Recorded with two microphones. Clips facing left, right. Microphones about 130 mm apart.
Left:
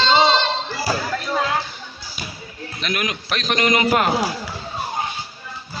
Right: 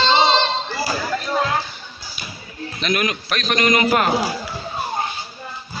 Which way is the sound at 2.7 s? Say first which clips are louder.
Right 3 dB; 10° left (ahead or behind).